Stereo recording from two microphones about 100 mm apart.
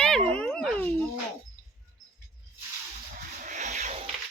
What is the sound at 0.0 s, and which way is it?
Dog, 10° left (ahead or behind).